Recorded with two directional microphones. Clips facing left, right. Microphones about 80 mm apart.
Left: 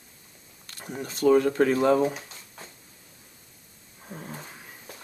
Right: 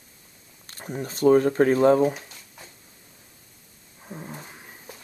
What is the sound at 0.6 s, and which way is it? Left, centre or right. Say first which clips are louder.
Speech: right 3 dB; right.